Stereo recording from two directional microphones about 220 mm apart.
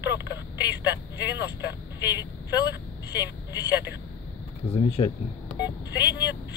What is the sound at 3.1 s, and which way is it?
Speech, 50° left (ahead or behind).